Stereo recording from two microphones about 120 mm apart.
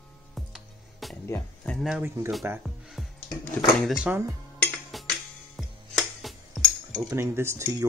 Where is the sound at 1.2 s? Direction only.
15° left (ahead or behind).